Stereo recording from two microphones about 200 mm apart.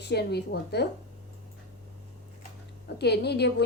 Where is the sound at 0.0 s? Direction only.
55° left (ahead or behind).